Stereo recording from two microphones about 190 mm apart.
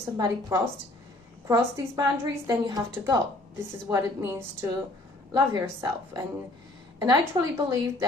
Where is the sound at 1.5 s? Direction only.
15° right (ahead or behind).